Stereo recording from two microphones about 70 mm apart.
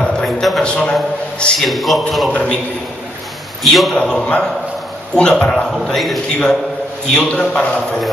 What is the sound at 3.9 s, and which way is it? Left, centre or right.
A man's voice, centre.